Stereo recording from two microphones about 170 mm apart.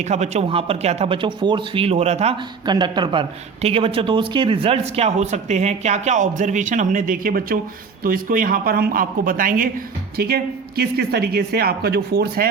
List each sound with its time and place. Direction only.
0.0 s speech: 40° right (ahead or behind)
2.6 s speech: 25° right (ahead or behind); by 12.5 s 65° right (ahead or behind)